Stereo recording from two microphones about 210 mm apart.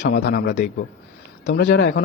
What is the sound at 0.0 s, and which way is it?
Speech, 55° left (ahead or behind).